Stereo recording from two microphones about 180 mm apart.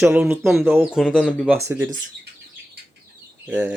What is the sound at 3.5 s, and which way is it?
Speech, 10° right (ahead or behind).